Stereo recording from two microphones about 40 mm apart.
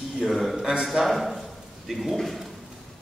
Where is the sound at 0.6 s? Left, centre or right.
Centre.